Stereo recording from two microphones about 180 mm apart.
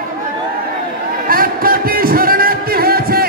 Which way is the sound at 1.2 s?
55° right (ahead or behind).